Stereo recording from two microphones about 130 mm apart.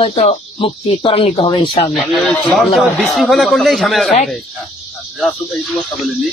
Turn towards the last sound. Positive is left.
turn(degrees=0)  # may be behind; listen again after turning